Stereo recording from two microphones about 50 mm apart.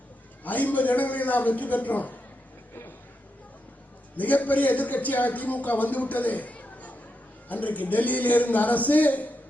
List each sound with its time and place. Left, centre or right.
0.4 s a man's voice: left
4.2 s a man's voice: left